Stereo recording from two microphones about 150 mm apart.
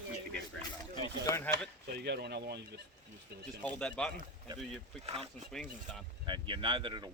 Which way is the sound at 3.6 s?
10° left (ahead or behind).